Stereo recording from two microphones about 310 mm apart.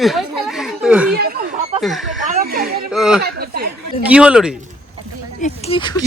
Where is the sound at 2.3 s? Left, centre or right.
Right.